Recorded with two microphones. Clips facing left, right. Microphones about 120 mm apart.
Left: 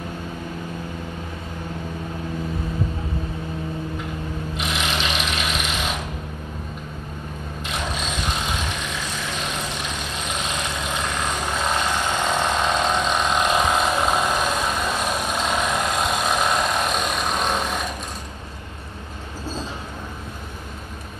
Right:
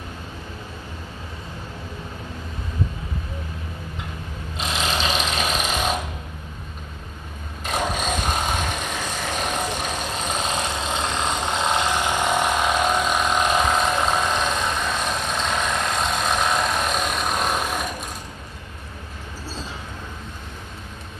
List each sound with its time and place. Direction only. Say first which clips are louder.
4.6 s sewing machine: right 2 dB; 35° right (ahead or behind)
7.6 s vehicle: right 5 dB; 45° right (ahead or behind)
10.8 s vehicle: right 1 dB; 30° right (ahead or behind); by 17.6 s centre (ahead or behind)